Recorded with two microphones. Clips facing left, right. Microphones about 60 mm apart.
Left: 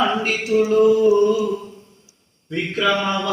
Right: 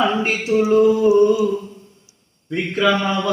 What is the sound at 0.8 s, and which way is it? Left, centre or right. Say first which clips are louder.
Mantra: even; centre.